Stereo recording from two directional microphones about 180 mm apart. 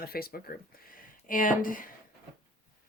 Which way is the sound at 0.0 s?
55° left (ahead or behind).